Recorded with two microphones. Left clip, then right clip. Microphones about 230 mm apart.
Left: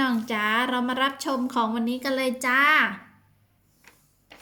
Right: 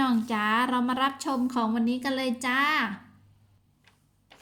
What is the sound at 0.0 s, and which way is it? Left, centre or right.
A woman's voice, centre.